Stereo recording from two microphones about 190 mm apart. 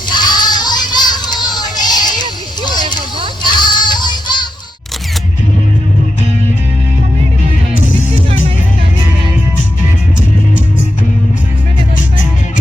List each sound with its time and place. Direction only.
0.1 s music: 20° left (ahead or behind)
2.6 s a sound: 20° left (ahead or behind)
3.5 s music: 25° left (ahead or behind)